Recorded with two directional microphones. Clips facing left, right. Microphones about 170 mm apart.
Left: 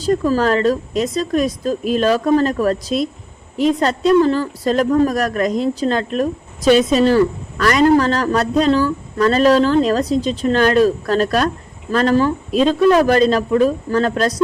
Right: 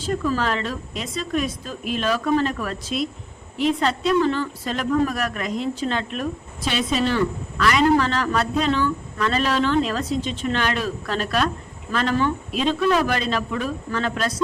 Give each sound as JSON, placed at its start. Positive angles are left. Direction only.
{"t": 0.0, "sound": "speech", "side_deg": 40}